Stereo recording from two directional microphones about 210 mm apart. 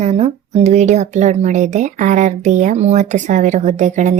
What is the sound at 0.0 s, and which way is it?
Speech, 30° right (ahead or behind).